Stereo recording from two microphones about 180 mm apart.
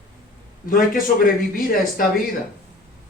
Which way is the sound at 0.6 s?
50° left (ahead or behind).